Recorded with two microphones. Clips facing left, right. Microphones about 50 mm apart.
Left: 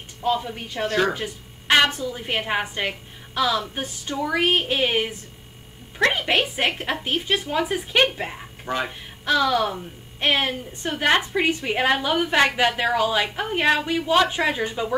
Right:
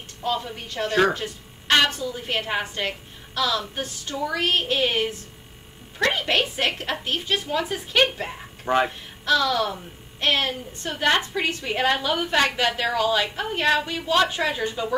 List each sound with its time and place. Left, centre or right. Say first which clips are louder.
0.2 s a woman's voice: left 3 dB; centre
6.1 s a woman's voice: left 1 dB; centre
8.6 s speech: right 5 dB; centre
9.2 s a woman's voice: left 1 dB; centre